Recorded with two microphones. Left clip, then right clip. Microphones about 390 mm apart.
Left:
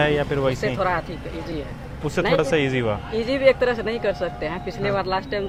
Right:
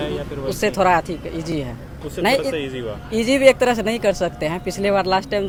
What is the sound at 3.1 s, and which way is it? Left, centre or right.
Speech, right.